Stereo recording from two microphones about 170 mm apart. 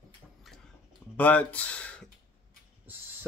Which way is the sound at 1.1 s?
10° left (ahead or behind).